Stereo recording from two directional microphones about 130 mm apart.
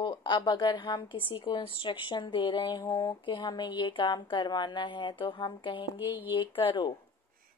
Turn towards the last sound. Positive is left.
turn(degrees=40)  # may be behind; listen again after turning